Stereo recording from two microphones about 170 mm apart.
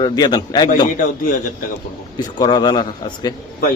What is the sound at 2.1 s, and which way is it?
Speech, 25° left (ahead or behind).